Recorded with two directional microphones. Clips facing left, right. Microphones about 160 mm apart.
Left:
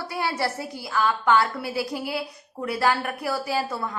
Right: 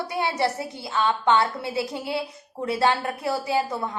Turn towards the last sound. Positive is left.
turn(degrees=-20)  # may be behind; listen again after turning